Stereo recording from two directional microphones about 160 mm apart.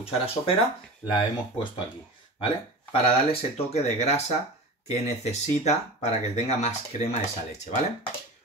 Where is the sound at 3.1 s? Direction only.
40° left (ahead or behind).